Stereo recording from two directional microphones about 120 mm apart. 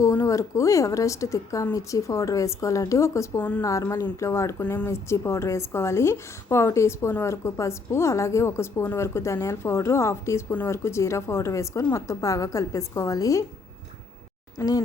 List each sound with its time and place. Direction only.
0.0 s a woman's voice: 25° left (ahead or behind)
4.6 s speech: 10° left (ahead or behind)
4.9 s a woman's voice: 25° left (ahead or behind)
14.6 s a woman's voice: 20° left (ahead or behind)